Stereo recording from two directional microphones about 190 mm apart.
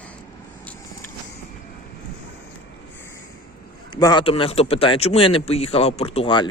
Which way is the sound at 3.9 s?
25° left (ahead or behind).